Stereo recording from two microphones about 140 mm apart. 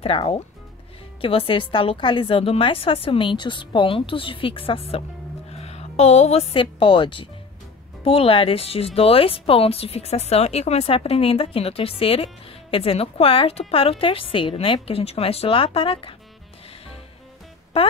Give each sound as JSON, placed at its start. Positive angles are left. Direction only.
{"t": 0.0, "sound": "a woman's voice", "side_deg": 45}